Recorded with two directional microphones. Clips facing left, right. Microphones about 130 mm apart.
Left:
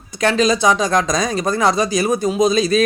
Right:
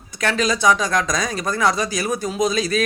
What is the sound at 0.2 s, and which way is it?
Speech, 25° left (ahead or behind).